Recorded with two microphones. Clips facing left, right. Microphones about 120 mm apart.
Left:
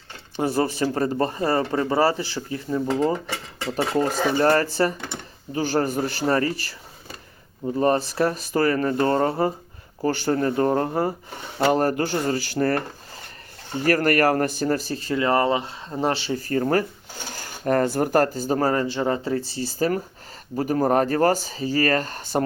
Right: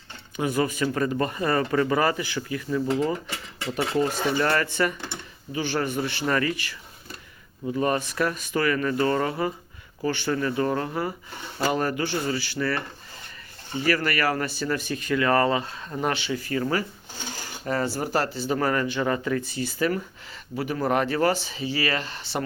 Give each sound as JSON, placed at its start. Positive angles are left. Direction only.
{"t": 0.3, "sound": "speech", "side_deg": 35}
{"t": 7.8, "sound": "speech", "side_deg": 35}